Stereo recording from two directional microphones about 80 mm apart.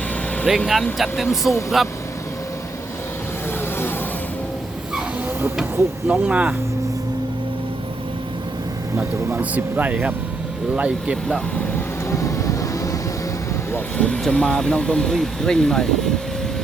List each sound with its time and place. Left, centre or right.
0.5 s speech: centre
6.1 s speech: centre
9.0 s speech: right
12.0 s vehicle: left
14.0 s speech: centre